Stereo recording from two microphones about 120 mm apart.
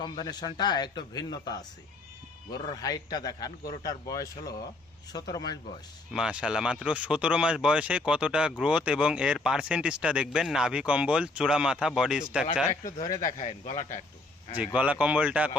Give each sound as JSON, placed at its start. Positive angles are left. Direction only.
{"t": 0.2, "sound": "a man's voice", "side_deg": 35}
{"t": 6.1, "sound": "speech", "side_deg": -5}
{"t": 12.8, "sound": "speech", "side_deg": 30}
{"t": 13.2, "sound": "speech", "side_deg": 65}
{"t": 14.8, "sound": "speech", "side_deg": -10}